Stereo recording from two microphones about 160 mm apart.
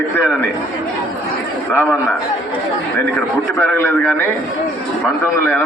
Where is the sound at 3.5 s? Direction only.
10° left (ahead or behind).